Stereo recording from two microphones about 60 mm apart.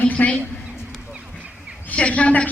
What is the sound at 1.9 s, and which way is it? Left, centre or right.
Speech, left.